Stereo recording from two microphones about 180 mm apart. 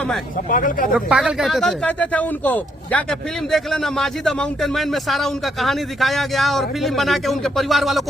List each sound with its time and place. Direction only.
0.5 s speech: 50° left (ahead or behind)
0.9 s speech: 5° right (ahead or behind)